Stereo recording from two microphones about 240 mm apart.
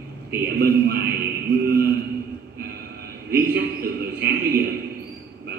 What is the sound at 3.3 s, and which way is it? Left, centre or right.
Speech, right.